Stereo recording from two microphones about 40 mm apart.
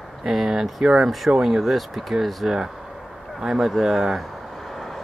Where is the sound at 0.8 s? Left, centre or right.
Centre.